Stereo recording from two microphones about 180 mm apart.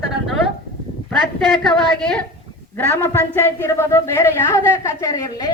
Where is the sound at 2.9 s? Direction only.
10° left (ahead or behind).